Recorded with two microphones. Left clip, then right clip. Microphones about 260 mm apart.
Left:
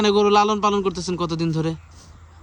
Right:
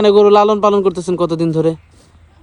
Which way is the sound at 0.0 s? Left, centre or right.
Centre.